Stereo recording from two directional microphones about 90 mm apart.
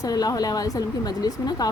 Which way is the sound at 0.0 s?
45° left (ahead or behind).